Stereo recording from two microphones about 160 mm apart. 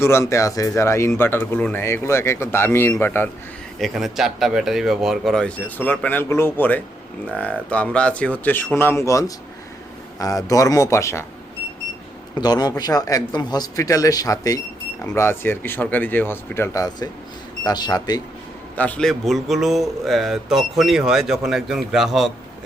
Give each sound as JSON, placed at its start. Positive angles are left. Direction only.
{"t": 0.0, "sound": "speech", "side_deg": 15}
{"t": 3.8, "sound": "speech", "side_deg": 0}
{"t": 12.4, "sound": "speech", "side_deg": 25}
{"t": 18.8, "sound": "speech", "side_deg": 5}